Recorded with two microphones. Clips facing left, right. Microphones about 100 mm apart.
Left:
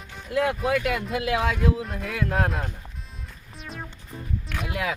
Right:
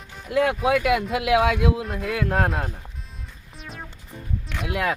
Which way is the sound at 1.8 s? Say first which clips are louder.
Right 3 dB; centre (ahead or behind).